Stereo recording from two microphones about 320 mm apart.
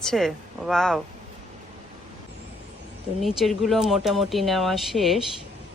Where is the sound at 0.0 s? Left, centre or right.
Centre.